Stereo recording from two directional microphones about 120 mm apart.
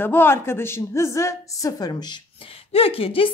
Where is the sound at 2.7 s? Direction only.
50° left (ahead or behind).